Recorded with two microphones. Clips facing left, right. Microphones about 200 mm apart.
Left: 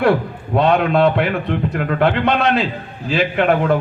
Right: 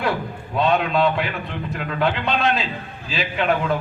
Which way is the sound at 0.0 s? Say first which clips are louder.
Left 8 dB; 60° left (ahead or behind).